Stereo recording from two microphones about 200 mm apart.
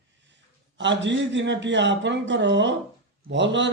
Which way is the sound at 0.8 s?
65° right (ahead or behind).